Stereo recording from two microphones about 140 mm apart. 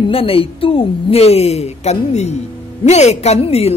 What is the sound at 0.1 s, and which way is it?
A man's voice, 40° left (ahead or behind).